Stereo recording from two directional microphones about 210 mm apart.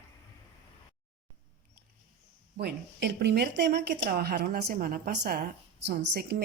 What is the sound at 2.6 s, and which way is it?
Speech, 50° right (ahead or behind).